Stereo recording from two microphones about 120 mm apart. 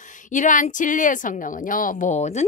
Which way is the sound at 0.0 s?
90° left.